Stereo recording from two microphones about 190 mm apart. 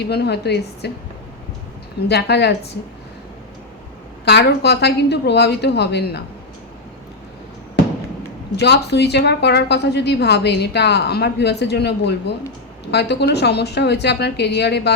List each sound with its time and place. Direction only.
0.0 s a woman's voice: 60° left (ahead or behind)
2.0 s a woman's voice: 60° left (ahead or behind)
4.3 s a woman's voice: 60° left (ahead or behind)
7.8 s a sound: 65° left (ahead or behind)
8.5 s a woman's voice: 60° left (ahead or behind)